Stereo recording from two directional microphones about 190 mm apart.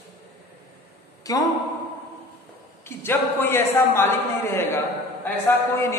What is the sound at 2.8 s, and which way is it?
A man's voice, 10° left (ahead or behind).